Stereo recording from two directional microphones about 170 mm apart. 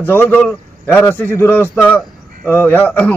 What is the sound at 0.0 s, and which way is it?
A man's voice, 10° left (ahead or behind).